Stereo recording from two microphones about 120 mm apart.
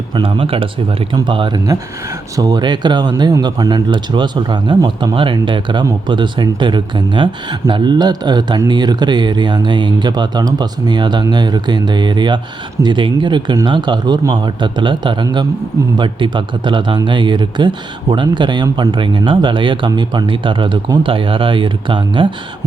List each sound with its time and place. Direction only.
0.1 s speech: 45° right (ahead or behind)